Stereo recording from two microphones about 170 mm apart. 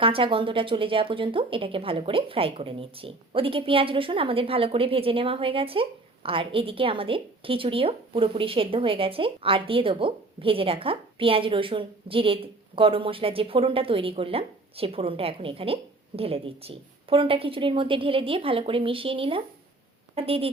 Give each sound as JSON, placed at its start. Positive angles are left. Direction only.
{"t": 0.0, "sound": "speech", "side_deg": -30}